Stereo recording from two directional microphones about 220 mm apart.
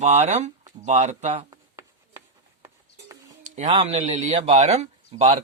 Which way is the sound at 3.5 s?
30° right (ahead or behind).